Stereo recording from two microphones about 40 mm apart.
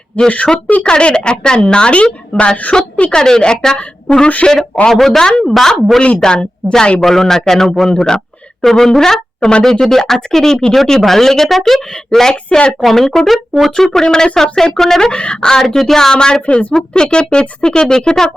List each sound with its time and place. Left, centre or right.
0.1 s a woman's voice: left
4.9 s a woman's voice: centre
6.1 s a woman's voice: centre
7.0 s speech: centre
9.4 s a woman's voice: left
9.6 s speech: centre
12.5 s a woman's voice: left
12.8 s a woman's voice: centre
15.1 s a woman's voice: left